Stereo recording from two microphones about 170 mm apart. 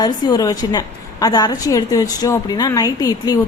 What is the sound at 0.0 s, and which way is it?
A woman's voice, 20° left (ahead or behind).